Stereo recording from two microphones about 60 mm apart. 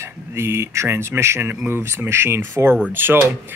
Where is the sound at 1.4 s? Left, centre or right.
Right.